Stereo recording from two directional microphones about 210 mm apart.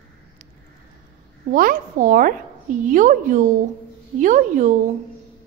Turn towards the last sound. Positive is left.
turn(degrees=-35)  # may be behind; listen again after turning